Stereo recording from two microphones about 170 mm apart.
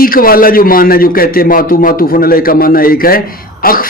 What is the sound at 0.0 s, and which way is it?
A man's voice, 55° left (ahead or behind).